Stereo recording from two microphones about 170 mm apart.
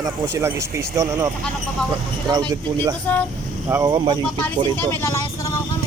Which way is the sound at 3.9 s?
30° right (ahead or behind).